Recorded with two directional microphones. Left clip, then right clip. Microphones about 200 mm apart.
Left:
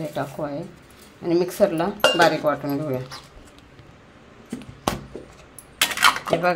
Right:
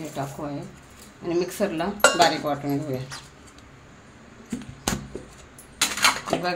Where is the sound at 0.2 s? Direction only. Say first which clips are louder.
Left 3 dB; 35° left (ahead or behind).